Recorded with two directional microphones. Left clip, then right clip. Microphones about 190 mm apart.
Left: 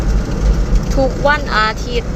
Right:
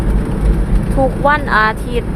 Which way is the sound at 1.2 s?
20° right (ahead or behind).